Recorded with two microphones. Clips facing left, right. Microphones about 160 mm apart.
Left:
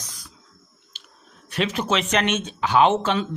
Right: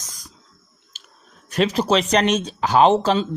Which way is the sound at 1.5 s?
40° right (ahead or behind).